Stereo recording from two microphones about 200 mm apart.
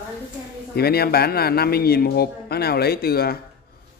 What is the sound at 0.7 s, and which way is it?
A man's voice, 50° left (ahead or behind).